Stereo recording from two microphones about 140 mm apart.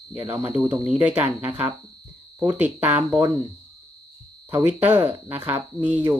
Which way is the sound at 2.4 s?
15° right (ahead or behind).